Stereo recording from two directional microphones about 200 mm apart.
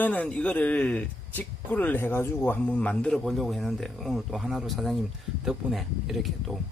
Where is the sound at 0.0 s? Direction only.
5° left (ahead or behind).